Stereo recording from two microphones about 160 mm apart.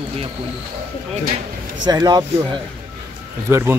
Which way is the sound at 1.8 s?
25° right (ahead or behind).